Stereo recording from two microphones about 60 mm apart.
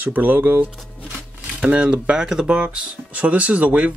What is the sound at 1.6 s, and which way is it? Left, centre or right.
Speech, centre.